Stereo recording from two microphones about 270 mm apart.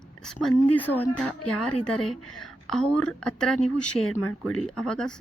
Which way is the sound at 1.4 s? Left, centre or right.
Left.